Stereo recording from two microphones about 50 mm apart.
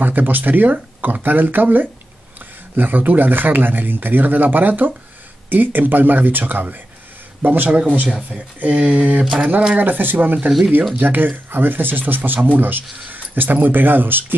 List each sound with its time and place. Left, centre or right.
0.0 s speech: right
9.8 s speech: right